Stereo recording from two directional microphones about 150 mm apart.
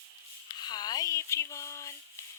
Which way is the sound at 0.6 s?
25° left (ahead or behind).